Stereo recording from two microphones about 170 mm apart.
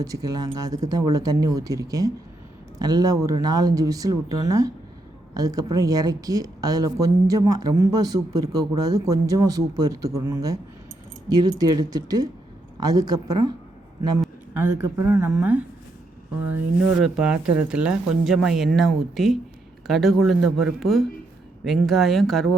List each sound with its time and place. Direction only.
0.0 s speech: 20° right (ahead or behind)
14.5 s speech: 10° right (ahead or behind)